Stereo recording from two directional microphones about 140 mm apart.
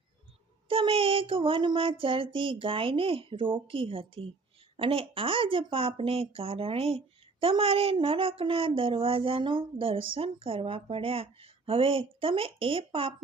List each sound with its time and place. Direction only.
0.7 s speech: 40° right (ahead or behind)